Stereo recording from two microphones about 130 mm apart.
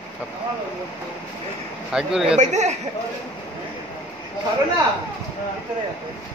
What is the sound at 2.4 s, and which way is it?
Speech, 60° right (ahead or behind).